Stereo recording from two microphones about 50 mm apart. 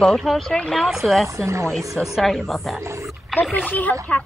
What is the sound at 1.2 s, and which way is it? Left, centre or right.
Speech, right.